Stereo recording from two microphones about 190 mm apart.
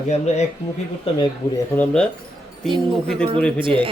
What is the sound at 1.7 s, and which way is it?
Speech, 5° left (ahead or behind).